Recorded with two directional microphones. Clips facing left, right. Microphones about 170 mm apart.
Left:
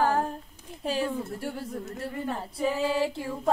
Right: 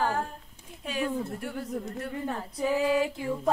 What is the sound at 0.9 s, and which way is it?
Speech, 35° left (ahead or behind).